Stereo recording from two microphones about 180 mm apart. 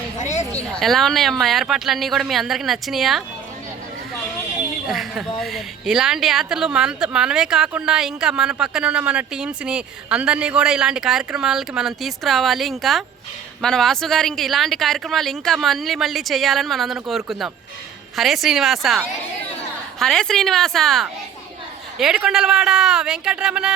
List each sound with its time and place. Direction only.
0.2 s a sound: 40° left (ahead or behind)
0.5 s a woman's voice: centre (ahead or behind)
4.9 s a woman's voice: centre (ahead or behind)
20.0 s a woman's voice: 5° left (ahead or behind)